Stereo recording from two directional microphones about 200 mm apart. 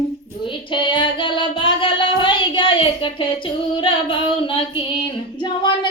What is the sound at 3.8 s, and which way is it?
Singing, 25° left (ahead or behind).